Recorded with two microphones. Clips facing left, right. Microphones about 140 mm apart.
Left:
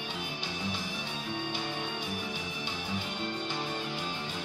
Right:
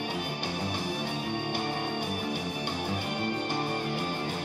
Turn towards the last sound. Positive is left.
turn(degrees=-55)  # may be behind; listen again after turning